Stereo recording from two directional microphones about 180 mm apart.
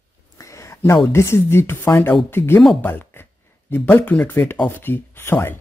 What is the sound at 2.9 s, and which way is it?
Speech, 10° left (ahead or behind).